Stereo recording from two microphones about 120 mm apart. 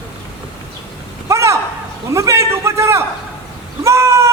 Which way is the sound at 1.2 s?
25° right (ahead or behind).